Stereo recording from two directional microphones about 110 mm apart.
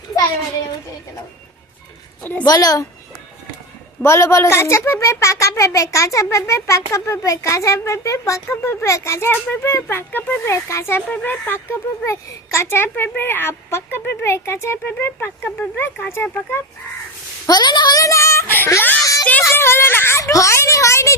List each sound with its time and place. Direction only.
2.4 s speech: 35° left (ahead or behind)
4.0 s speech: 25° left (ahead or behind)
9.3 s speech: 15° left (ahead or behind)
17.4 s speech: 40° left (ahead or behind)